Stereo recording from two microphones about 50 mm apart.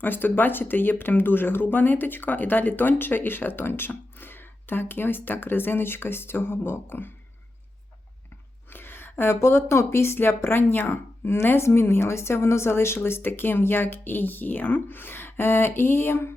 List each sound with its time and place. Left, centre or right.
0.0 s speech: left
8.7 s a sound: left
9.4 s speech: left